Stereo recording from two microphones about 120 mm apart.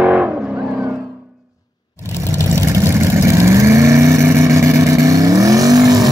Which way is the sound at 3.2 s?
25° right (ahead or behind).